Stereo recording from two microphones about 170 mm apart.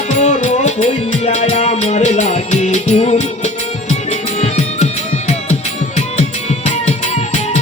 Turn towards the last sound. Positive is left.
turn(degrees=40)  # may be behind; listen again after turning